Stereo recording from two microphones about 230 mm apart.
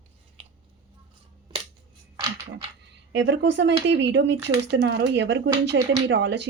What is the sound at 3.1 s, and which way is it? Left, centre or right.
Speech, right.